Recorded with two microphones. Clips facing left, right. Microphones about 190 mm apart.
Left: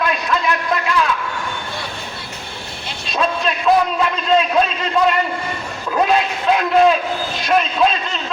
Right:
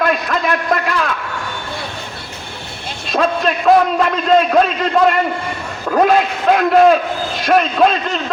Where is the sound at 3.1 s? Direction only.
50° right (ahead or behind).